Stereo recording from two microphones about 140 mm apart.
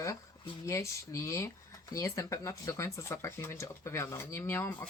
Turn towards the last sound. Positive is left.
turn(degrees=20)  # may be behind; listen again after turning